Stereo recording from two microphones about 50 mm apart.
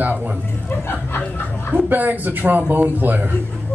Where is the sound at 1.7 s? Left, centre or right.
Right.